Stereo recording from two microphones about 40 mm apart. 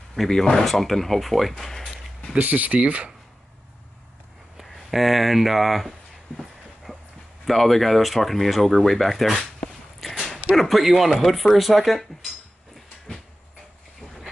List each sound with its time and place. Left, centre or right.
0.3 s speech: centre
1.7 s a sound: centre
2.3 s speech: right
4.6 s a sound: centre
7.4 s speech: centre
10.0 s dog: centre
10.5 s speech: centre